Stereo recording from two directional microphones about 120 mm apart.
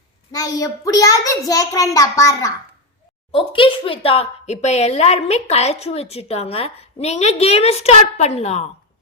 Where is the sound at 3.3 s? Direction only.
45° left (ahead or behind); by 8.7 s 60° left (ahead or behind).